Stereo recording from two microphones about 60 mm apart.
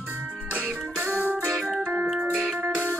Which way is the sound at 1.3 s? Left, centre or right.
Centre.